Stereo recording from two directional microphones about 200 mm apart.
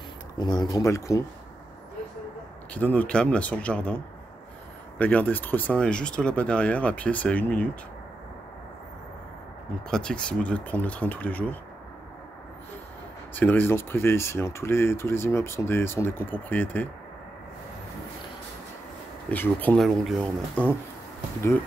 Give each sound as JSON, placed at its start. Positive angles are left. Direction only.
{"t": 0.4, "sound": "speech", "side_deg": 20}
{"t": 2.7, "sound": "speech", "side_deg": 10}
{"t": 9.8, "sound": "speech", "side_deg": 5}
{"t": 13.3, "sound": "speech", "side_deg": 10}
{"t": 19.3, "sound": "speech", "side_deg": 10}